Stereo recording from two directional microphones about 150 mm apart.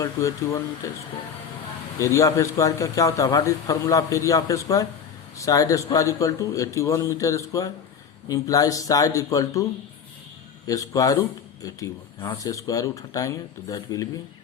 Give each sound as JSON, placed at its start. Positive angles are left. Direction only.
{"t": 0.0, "sound": "a man's voice", "side_deg": 20}
{"t": 10.7, "sound": "a man's voice", "side_deg": 20}